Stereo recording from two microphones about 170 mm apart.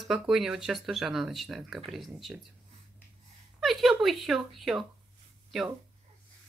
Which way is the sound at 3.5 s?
Centre (ahead or behind).